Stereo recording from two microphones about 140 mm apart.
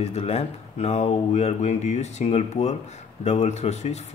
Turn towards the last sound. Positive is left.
turn(degrees=50)  # may be behind; listen again after turning